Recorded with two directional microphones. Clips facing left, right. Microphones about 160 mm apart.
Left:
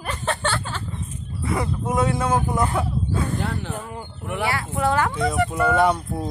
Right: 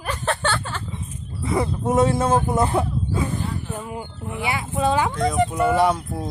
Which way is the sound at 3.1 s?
10° right (ahead or behind).